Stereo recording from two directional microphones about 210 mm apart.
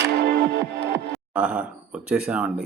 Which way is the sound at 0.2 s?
50° right (ahead or behind).